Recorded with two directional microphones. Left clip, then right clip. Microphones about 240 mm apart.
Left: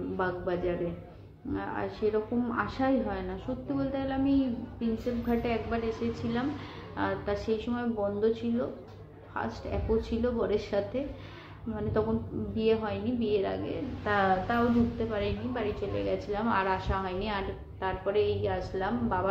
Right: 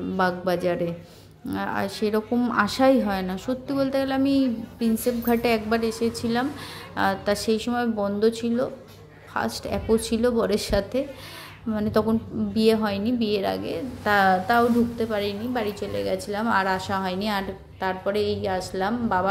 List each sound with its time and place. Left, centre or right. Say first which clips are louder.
0.2 s a woman's voice: right 8 dB; right
12.5 s a woman's voice: right 7 dB; right